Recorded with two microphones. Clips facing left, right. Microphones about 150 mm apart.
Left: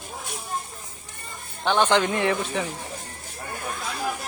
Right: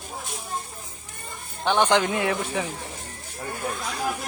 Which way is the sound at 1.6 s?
15° right (ahead or behind).